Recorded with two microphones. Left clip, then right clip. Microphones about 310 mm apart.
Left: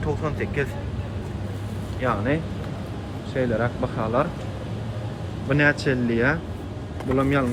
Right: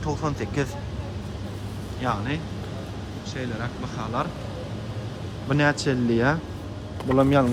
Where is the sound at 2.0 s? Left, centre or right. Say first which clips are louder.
Left 4 dB; centre.